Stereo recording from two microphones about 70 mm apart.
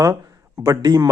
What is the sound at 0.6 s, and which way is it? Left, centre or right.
Speech, right.